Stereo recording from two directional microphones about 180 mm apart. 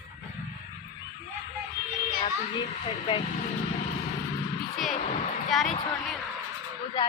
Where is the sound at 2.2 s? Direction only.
30° left (ahead or behind).